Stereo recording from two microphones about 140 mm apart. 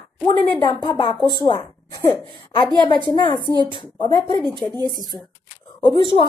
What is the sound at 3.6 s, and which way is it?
Speech, 35° left (ahead or behind).